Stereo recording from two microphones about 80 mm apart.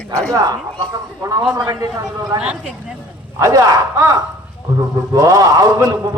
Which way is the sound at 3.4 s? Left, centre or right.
Right.